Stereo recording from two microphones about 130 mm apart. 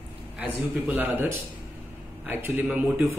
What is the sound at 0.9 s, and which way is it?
Speech, 15° right (ahead or behind).